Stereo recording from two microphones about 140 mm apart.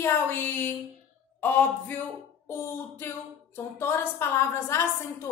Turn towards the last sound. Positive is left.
turn(degrees=20)  # may be behind; listen again after turning